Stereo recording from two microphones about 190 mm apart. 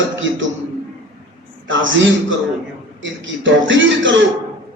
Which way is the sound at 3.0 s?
80° right.